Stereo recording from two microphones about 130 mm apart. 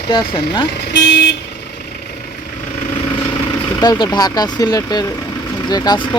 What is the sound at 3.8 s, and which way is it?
Speech, 35° left (ahead or behind).